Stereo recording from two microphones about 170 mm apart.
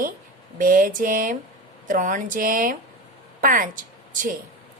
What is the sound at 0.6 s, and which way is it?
A woman's voice, 55° right (ahead or behind).